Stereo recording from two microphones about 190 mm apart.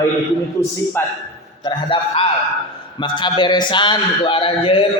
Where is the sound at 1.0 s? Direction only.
10° left (ahead or behind).